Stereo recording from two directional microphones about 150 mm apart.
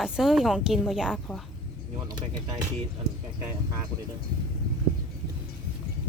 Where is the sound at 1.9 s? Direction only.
30° right (ahead or behind).